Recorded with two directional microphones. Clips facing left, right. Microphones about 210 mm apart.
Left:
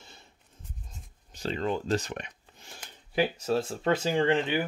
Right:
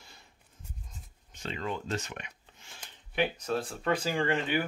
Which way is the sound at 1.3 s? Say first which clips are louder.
Left 6 dB; 35° left (ahead or behind).